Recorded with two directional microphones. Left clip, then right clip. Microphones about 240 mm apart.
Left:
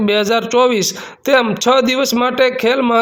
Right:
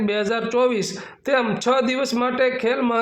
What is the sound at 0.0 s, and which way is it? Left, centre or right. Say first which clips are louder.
A man's voice: left 8 dB; left.